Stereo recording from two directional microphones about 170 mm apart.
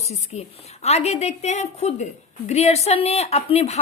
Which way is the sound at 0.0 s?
40° left (ahead or behind).